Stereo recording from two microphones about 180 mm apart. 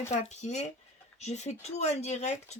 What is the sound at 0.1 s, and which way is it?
Speech, 40° left (ahead or behind).